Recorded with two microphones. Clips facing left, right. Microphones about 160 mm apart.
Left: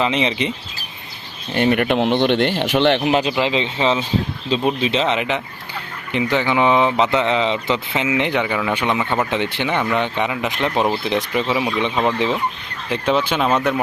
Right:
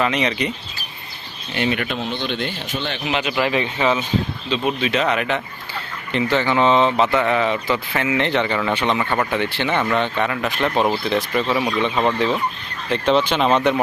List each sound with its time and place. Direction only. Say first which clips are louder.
0.0 s speech: left 1 dB; 25° left (ahead or behind)
1.5 s speech: left 6 dB; 50° left (ahead or behind); by 3.1 s 70° left (ahead or behind)
3.1 s speech: left 5 dB; 35° left (ahead or behind)
3.3 s speech: left 1 dB; 20° left (ahead or behind)
11.4 s speech: even; 5° left (ahead or behind)
12.9 s speech: right 1 dB; 10° left (ahead or behind)